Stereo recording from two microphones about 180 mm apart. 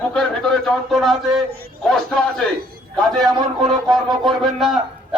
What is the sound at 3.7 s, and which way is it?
A man's voice, centre (ahead or behind).